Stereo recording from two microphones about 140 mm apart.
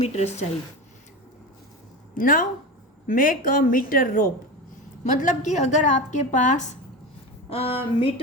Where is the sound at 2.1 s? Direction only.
75° left (ahead or behind).